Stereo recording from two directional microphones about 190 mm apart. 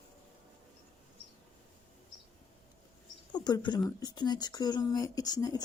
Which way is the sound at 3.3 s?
20° left (ahead or behind).